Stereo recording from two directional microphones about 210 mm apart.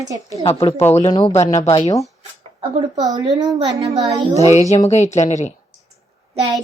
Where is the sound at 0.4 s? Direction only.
25° left (ahead or behind).